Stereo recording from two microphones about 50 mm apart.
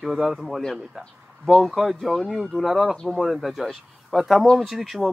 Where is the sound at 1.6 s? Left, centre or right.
Centre.